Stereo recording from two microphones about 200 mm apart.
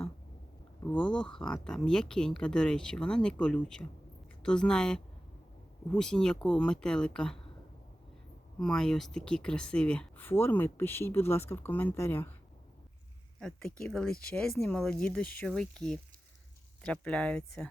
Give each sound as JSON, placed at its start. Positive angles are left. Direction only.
{"t": 0.8, "sound": "speech", "side_deg": 5}
{"t": 8.5, "sound": "speech", "side_deg": 5}
{"t": 13.4, "sound": "speech", "side_deg": 5}